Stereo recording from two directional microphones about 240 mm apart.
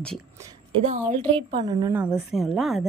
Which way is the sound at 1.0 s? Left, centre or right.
Right.